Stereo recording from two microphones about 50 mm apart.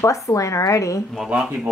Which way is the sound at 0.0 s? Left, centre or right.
Left.